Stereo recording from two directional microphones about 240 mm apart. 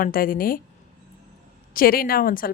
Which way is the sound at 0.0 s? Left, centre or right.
Left.